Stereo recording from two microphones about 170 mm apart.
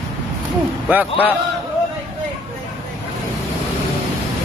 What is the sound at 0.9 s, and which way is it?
Speech, 10° right (ahead or behind).